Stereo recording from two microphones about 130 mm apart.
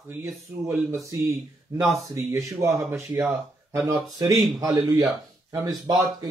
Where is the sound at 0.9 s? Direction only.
25° right (ahead or behind).